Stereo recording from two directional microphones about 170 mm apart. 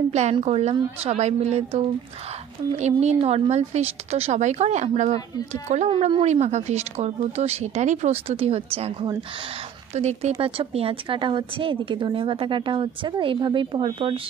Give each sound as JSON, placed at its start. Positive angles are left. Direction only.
{"t": 0.1, "sound": "speech", "side_deg": -40}
{"t": 2.8, "sound": "a woman's voice", "side_deg": -40}